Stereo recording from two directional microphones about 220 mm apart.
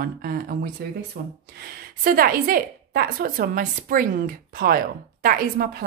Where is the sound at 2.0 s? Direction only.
40° right (ahead or behind).